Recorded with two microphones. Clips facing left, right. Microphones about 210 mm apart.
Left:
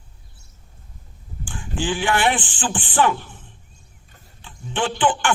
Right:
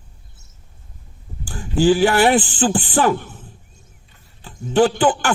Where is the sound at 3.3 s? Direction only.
40° right (ahead or behind).